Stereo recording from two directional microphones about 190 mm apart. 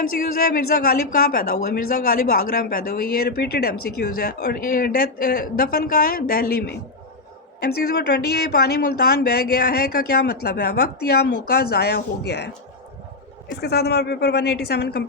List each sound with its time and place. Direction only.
0.3 s a woman's voice: 50° left (ahead or behind)
13.5 s a woman's voice: 60° left (ahead or behind)